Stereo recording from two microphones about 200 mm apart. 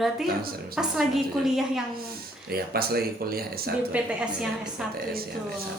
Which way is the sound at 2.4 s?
50° right (ahead or behind).